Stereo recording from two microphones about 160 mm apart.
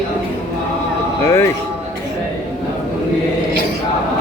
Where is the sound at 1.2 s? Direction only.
15° left (ahead or behind).